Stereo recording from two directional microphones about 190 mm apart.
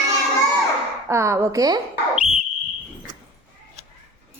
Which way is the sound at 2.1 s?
5° right (ahead or behind).